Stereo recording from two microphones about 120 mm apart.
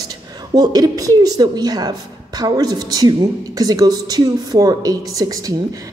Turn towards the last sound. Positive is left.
turn(degrees=-30)  # may be behind; listen again after turning